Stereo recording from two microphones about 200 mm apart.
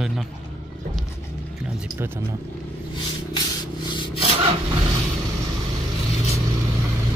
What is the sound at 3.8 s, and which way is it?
Rub, 25° left (ahead or behind).